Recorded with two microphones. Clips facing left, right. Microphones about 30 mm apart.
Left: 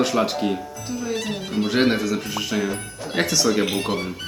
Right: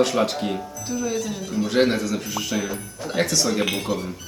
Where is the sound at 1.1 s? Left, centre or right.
Left.